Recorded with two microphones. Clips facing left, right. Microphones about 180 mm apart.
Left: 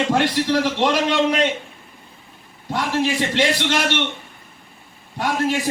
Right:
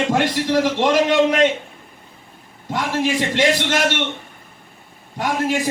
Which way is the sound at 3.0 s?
15° right (ahead or behind).